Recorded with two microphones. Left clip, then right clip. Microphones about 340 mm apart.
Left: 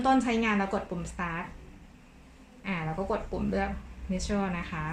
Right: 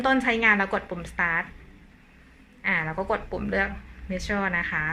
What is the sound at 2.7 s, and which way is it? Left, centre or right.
A woman's voice, right.